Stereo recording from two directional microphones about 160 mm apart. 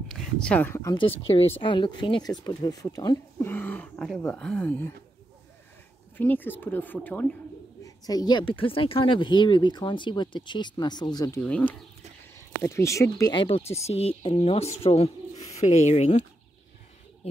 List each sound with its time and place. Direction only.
0.1 s speech: 5° left (ahead or behind)
0.9 s speech: 35° left (ahead or behind); by 4.9 s 10° left (ahead or behind)
6.1 s speech: 10° left (ahead or behind)
7.8 s speech: 25° left (ahead or behind)
11.4 s speech: 10° left (ahead or behind)
13.4 s speech: 35° left (ahead or behind)